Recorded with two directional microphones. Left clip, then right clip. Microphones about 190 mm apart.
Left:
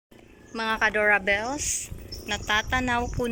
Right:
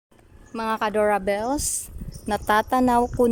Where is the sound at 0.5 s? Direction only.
15° right (ahead or behind).